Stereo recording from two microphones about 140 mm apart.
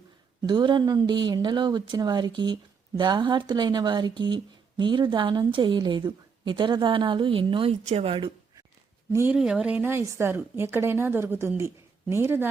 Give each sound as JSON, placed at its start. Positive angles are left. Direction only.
{"t": 0.4, "sound": "a woman's voice", "side_deg": -30}
{"t": 9.3, "sound": "a woman's voice", "side_deg": -5}